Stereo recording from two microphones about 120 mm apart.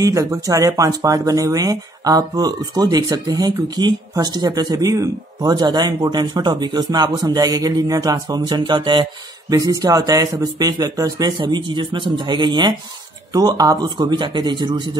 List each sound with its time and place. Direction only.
0.0 s speech: 30° right (ahead or behind)